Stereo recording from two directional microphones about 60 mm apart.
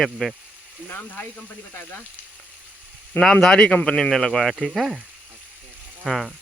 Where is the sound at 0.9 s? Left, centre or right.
Left.